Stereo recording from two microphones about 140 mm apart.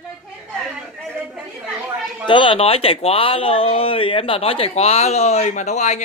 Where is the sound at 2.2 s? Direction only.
35° left (ahead or behind).